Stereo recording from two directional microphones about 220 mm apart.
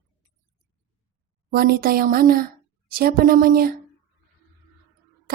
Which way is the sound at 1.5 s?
45° right (ahead or behind).